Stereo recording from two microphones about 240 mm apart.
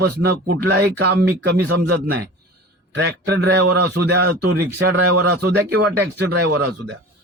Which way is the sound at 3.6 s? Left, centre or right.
Right.